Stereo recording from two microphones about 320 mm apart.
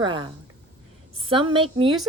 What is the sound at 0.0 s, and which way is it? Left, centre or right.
Speech, centre.